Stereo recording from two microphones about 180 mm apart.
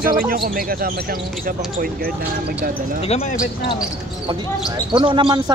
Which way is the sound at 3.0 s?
40° left (ahead or behind).